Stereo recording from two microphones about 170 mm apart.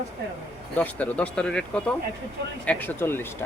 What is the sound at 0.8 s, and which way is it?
Speech, 10° left (ahead or behind).